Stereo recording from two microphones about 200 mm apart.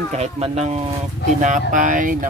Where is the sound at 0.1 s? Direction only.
35° right (ahead or behind).